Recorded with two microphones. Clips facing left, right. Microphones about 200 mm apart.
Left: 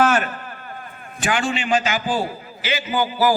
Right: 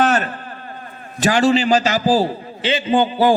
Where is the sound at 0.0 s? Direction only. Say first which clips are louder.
Right 1 dB; 35° right (ahead or behind).